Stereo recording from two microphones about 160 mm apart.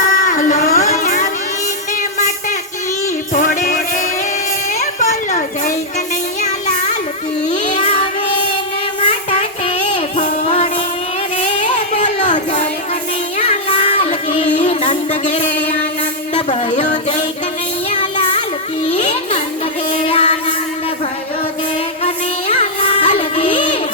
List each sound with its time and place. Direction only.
0.0 s a sound: 55° left (ahead or behind)
0.9 s a sound: 50° left (ahead or behind)
3.3 s music: 55° left (ahead or behind)
4.7 s children playing: 50° left (ahead or behind)
6.4 s child singing: 50° left (ahead or behind)
9.6 s music: 45° left (ahead or behind)
14.0 s child singing: 50° left (ahead or behind)
14.5 s music: 50° left (ahead or behind)
16.3 s a sound: 45° left (ahead or behind)
18.9 s a sound: 50° left (ahead or behind)
19.9 s music: 35° left (ahead or behind)
22.0 s music: 40° left (ahead or behind)